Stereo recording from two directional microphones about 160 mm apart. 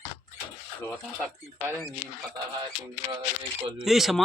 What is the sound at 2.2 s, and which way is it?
Speech, 25° right (ahead or behind).